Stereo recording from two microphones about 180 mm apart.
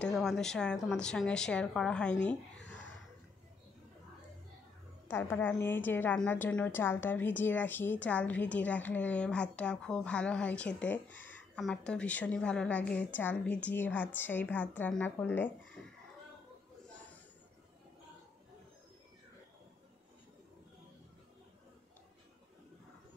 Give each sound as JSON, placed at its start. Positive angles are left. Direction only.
{"t": 0.0, "sound": "a woman's voice", "side_deg": 0}
{"t": 5.0, "sound": "a woman's voice", "side_deg": 15}